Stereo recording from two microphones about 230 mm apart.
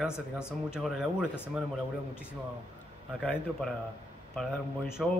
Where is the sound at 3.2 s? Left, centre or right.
Centre.